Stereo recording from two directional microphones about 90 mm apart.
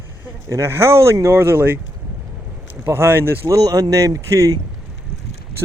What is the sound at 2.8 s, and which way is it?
Speech, 25° right (ahead or behind).